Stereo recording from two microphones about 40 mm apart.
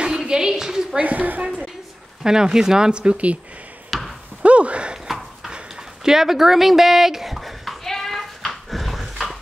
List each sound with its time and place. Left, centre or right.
0.0 s a sound: centre
0.9 s a woman's voice: right
2.2 s speech: centre; by 3.3 s right
3.9 s basketball bounce: centre
4.4 s speech: right
5.0 s horse: centre
6.0 s speech: centre
7.8 s a sound: centre
8.6 s dog: centre